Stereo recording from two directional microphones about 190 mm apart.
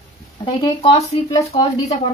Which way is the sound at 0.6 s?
25° left (ahead or behind).